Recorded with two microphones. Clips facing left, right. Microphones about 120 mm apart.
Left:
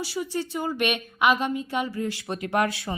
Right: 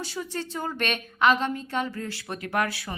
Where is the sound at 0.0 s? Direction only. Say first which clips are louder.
Left 4 dB; 10° left (ahead or behind).